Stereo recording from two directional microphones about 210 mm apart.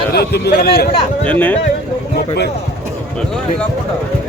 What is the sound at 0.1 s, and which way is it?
Speech, 50° left (ahead or behind).